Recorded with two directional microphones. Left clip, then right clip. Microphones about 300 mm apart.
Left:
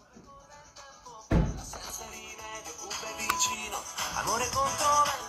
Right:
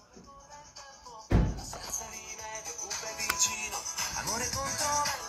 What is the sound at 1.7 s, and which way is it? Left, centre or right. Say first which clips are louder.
Music: right 1 dB; centre.